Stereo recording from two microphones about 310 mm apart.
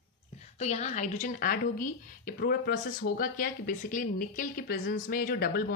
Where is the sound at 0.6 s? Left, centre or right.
Left.